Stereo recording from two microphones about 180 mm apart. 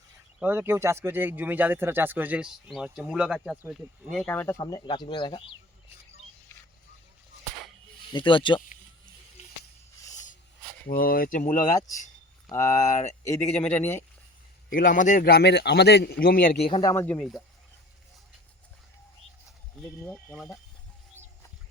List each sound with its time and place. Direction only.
0.3 s speech: 10° right (ahead or behind); by 5.4 s 25° left (ahead or behind)
8.1 s speech: 25° left (ahead or behind)
10.8 s speech: 55° left (ahead or behind)
12.5 s speech: 20° left (ahead or behind)
12.9 s speech: 40° left (ahead or behind)
13.2 s speech: 15° left (ahead or behind)
14.7 s speech: 50° left (ahead or behind)
16.6 s speech: 30° left (ahead or behind)
16.9 s speech: 10° left (ahead or behind)
20.1 s speech: 10° left (ahead or behind)